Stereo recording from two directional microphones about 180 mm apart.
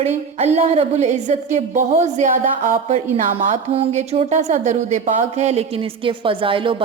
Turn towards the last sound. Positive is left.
turn(degrees=-30)  # may be behind; listen again after turning